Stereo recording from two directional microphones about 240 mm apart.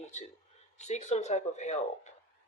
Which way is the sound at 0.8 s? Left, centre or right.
Left.